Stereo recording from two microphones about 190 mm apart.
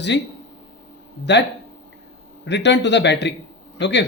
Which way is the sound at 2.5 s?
65° left (ahead or behind).